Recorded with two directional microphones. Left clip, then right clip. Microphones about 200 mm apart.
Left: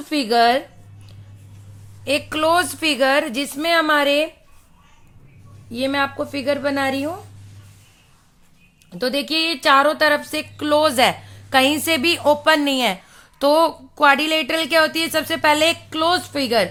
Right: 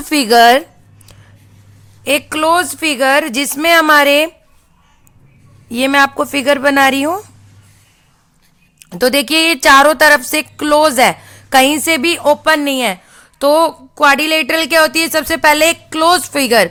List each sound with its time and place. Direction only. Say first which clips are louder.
0.1 s a woman's voice: right 8 dB; 40° right (ahead or behind)
2.0 s a woman's voice: right 6 dB; 25° right (ahead or behind)
5.7 s a woman's voice: right 10 dB; 40° right (ahead or behind)
8.8 s a woman's voice: right 9 dB; 45° right (ahead or behind)